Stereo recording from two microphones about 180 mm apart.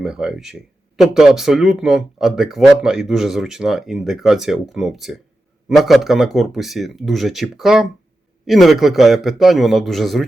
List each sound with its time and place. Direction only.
0.0 s speech: 5° right (ahead or behind)